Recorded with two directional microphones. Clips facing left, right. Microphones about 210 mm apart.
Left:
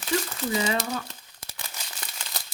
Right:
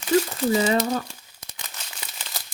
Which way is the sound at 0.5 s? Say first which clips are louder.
Right 5 dB; 40° right (ahead or behind).